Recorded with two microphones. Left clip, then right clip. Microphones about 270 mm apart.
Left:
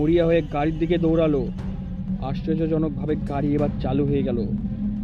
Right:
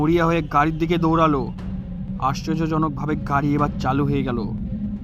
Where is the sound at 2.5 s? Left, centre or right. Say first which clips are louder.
Right 1 dB; centre.